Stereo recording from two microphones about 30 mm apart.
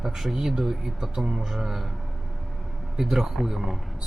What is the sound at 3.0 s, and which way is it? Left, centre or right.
Speech, centre.